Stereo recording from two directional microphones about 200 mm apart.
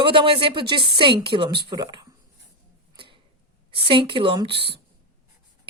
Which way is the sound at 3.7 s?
25° right (ahead or behind).